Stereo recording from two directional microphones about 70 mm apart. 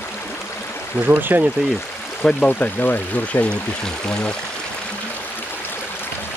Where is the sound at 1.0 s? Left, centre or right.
Right.